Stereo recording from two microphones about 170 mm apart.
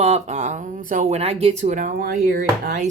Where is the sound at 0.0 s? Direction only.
45° right (ahead or behind); by 2.7 s 70° right (ahead or behind).